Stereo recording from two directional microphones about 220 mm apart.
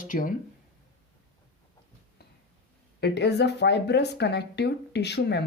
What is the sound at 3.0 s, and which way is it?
Speech, 50° left (ahead or behind).